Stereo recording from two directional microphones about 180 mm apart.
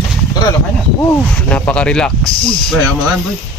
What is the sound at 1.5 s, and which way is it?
Speech, 5° left (ahead or behind).